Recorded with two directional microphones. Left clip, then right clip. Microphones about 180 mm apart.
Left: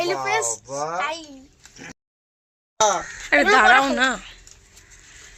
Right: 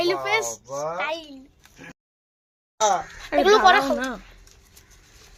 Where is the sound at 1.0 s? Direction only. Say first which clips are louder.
Left 2 dB; 35° right (ahead or behind).